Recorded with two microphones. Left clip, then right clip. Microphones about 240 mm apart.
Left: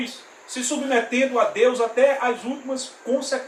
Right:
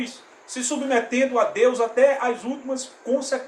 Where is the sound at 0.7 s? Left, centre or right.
Centre.